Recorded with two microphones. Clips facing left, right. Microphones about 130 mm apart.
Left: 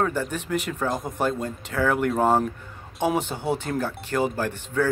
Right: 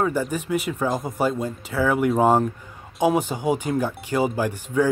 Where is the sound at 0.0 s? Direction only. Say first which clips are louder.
Right 2 dB; 10° right (ahead or behind).